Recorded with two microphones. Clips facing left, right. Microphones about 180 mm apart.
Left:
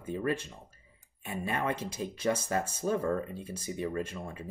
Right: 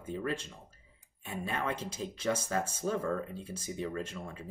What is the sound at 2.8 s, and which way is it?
Speech, 15° left (ahead or behind).